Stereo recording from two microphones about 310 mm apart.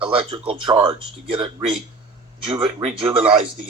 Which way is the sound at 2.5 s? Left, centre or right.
Centre.